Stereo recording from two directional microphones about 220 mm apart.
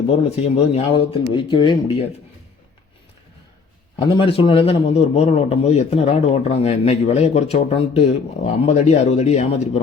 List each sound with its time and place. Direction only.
0.3 s a man's voice: 30° left (ahead or behind)
3.9 s a man's voice: 25° left (ahead or behind)